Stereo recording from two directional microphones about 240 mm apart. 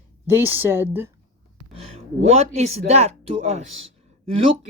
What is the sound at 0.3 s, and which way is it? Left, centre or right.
Speech, centre.